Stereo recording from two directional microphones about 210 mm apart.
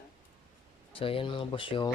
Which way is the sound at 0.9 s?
25° left (ahead or behind).